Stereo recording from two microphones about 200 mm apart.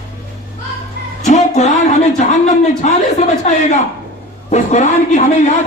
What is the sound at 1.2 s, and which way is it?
Music, 35° left (ahead or behind).